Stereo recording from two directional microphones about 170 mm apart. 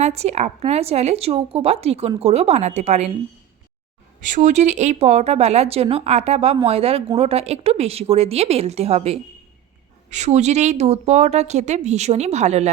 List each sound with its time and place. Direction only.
0.0 s speech: 40° right (ahead or behind)
4.3 s speech: 45° right (ahead or behind)